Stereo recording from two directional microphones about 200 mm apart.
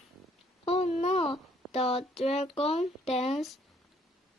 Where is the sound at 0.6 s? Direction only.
30° left (ahead or behind).